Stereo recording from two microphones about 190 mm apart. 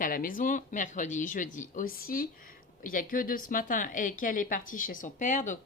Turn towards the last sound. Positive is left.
turn(degrees=40)  # may be behind; listen again after turning